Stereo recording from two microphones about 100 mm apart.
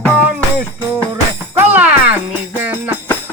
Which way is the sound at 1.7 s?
15° right (ahead or behind).